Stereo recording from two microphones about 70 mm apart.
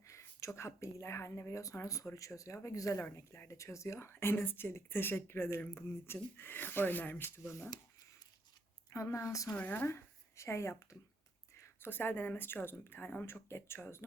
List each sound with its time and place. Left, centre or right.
0.0 s a woman's voice: left
8.9 s speech: left
9.5 s speech: left
9.8 s speech: left
11.5 s a sound: left
11.9 s a woman's voice: left